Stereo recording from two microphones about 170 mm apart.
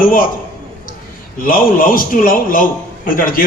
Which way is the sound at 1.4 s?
55° left (ahead or behind).